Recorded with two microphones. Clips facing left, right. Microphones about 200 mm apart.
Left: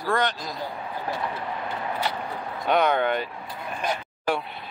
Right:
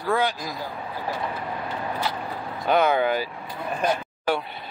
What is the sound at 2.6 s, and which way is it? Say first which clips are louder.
Speech: right 1 dB; centre (ahead or behind).